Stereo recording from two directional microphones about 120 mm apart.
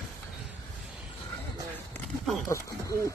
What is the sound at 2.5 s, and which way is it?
Speech, 25° left (ahead or behind).